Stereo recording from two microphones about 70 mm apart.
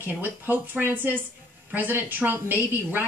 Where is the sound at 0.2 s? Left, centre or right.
Right.